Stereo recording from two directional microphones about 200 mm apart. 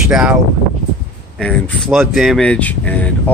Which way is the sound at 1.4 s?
5° left (ahead or behind).